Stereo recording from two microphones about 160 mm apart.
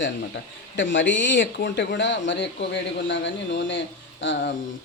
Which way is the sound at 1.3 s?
90° left.